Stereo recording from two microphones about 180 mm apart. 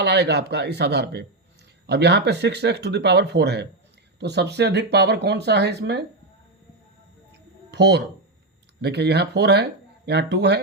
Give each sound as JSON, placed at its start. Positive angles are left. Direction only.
{"t": 0.0, "sound": "speech", "side_deg": -70}
{"t": 7.7, "sound": "speech", "side_deg": -70}